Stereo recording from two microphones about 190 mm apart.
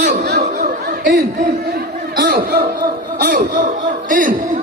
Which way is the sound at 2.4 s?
55° right (ahead or behind).